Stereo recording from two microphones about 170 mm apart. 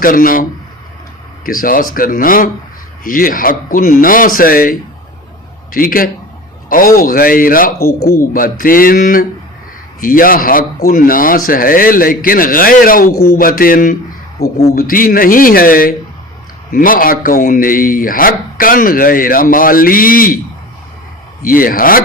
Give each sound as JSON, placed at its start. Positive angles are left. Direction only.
{"t": 0.0, "sound": "speech", "side_deg": 55}
{"t": 1.5, "sound": "speech", "side_deg": 55}
{"t": 14.4, "sound": "speech", "side_deg": 65}
{"t": 21.4, "sound": "speech", "side_deg": 55}